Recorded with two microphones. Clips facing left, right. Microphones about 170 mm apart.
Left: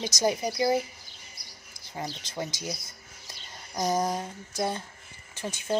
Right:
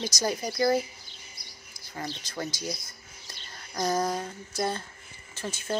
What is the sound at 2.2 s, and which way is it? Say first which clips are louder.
Speech: even; 20° left (ahead or behind).